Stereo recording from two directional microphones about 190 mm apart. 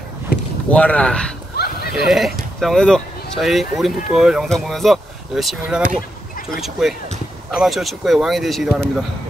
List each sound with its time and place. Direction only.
0.7 s speech: 5° left (ahead or behind)
1.6 s horse: 55° left (ahead or behind)
2.0 s speech: centre (ahead or behind)